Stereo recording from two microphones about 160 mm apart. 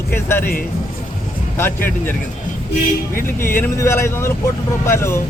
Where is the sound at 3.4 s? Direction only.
15° left (ahead or behind).